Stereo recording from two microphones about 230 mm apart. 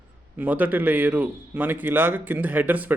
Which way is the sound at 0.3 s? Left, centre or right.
Centre.